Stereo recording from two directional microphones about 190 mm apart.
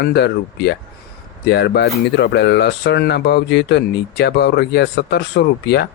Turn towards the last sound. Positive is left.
turn(degrees=60)  # may be behind; listen again after turning